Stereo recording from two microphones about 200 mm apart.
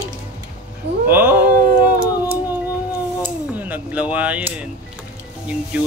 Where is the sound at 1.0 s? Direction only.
10° right (ahead or behind).